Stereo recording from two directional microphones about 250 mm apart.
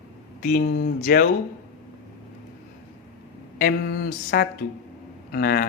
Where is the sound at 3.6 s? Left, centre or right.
Left.